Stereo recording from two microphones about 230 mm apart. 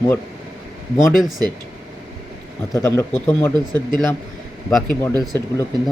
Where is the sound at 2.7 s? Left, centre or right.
Centre.